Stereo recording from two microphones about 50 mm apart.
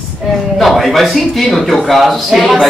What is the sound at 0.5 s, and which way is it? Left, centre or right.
A man's voice, centre.